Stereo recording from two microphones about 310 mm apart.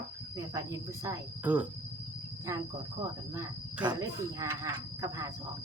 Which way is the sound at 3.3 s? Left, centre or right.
Centre.